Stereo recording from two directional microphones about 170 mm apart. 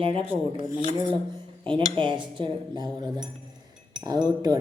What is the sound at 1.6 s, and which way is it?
Speech, 30° right (ahead or behind).